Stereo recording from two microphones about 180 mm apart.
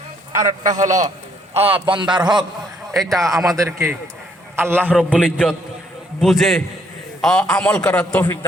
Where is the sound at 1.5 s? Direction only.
30° right (ahead or behind).